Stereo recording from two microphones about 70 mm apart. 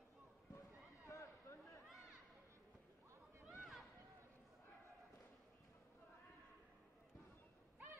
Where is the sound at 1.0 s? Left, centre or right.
Left.